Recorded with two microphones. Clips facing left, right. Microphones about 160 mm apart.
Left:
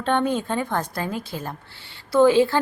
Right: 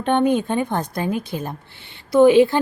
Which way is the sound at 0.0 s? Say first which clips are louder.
Right 4 dB; 15° right (ahead or behind).